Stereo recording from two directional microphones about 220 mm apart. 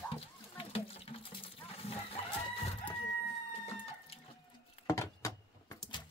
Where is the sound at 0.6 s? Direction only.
25° left (ahead or behind).